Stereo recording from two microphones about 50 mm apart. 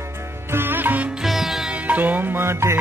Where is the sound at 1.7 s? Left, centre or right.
Right.